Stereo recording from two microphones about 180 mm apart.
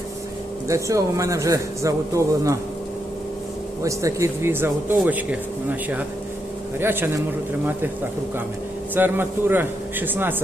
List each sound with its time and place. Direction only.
0.7 s speech: 15° right (ahead or behind)
3.8 s speech: 15° right (ahead or behind)
6.7 s speech: 10° right (ahead or behind)
9.0 s speech: 10° right (ahead or behind)